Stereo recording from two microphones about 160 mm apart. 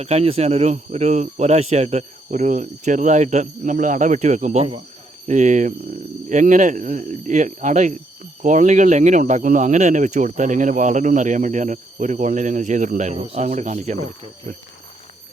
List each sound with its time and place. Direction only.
0.0 s speech: 40° right (ahead or behind)